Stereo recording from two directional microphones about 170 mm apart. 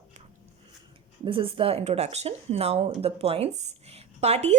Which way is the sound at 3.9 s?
40° right (ahead or behind).